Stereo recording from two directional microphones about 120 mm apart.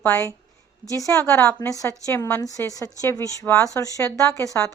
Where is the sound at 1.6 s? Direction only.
25° left (ahead or behind).